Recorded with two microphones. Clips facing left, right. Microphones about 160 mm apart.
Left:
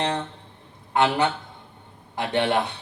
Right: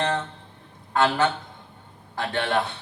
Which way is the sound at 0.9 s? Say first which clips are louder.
Even; 20° left (ahead or behind).